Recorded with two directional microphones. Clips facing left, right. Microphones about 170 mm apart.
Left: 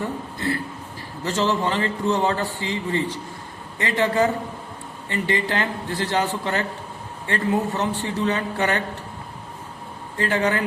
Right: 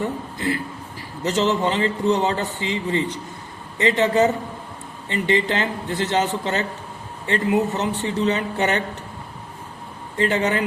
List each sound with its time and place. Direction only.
0.3 s a man's voice: 15° right (ahead or behind)
10.2 s a man's voice: 20° right (ahead or behind)